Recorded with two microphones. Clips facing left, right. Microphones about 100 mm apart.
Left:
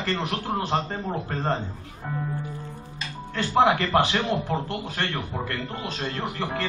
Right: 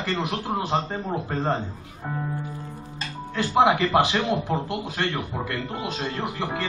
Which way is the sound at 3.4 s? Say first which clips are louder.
Right 1 dB; 10° right (ahead or behind).